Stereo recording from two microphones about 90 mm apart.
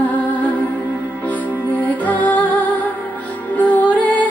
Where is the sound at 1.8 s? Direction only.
20° left (ahead or behind).